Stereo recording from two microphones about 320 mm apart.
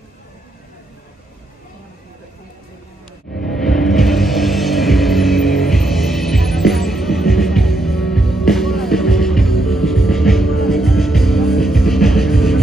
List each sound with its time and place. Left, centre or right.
3.4 s music: centre